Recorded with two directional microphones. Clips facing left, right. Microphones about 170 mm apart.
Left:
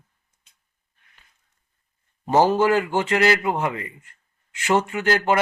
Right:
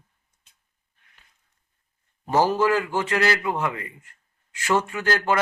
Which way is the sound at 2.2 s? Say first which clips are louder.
Left 3 dB; 25° left (ahead or behind).